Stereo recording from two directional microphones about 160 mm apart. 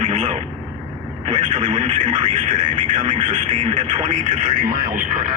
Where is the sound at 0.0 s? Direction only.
40° right (ahead or behind).